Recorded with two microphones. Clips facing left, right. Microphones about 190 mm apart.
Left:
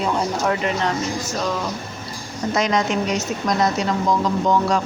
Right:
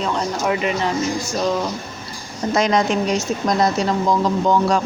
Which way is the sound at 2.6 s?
35° right (ahead or behind).